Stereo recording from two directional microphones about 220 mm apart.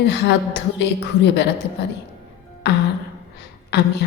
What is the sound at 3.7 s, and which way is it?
Speech, 50° left (ahead or behind).